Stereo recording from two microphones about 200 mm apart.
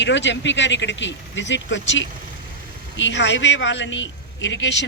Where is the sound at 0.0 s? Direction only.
65° left (ahead or behind).